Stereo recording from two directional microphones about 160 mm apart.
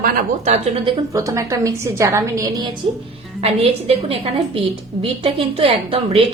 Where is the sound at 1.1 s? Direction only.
20° right (ahead or behind).